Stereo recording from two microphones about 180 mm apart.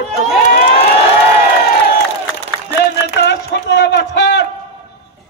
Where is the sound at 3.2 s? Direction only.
75° left (ahead or behind).